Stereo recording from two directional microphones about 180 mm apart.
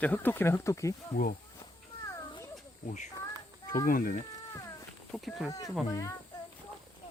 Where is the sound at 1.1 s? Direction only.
50° left (ahead or behind).